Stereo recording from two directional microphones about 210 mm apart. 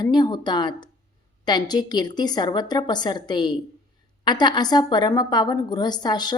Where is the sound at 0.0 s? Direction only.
20° left (ahead or behind).